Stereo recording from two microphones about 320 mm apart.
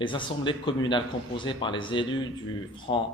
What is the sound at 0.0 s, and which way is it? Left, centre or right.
Speech, centre.